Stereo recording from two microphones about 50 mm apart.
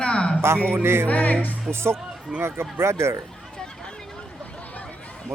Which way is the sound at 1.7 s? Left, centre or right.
Right.